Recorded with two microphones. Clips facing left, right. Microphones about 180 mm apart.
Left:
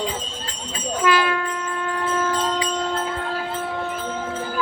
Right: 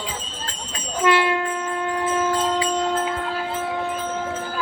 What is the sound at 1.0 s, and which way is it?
Train, 25° right (ahead or behind).